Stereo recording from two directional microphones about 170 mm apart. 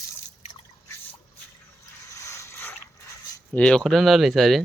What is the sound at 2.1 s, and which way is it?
Boat, 20° left (ahead or behind).